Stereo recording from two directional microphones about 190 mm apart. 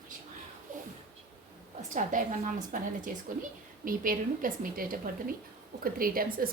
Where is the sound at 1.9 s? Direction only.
45° right (ahead or behind).